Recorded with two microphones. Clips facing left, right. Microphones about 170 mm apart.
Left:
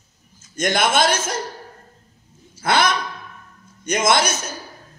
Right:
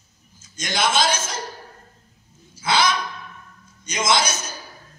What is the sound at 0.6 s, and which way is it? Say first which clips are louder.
Speech: left 4 dB; 55° left (ahead or behind).